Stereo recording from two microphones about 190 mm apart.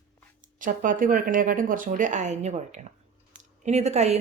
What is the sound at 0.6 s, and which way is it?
A woman's voice, 45° right (ahead or behind).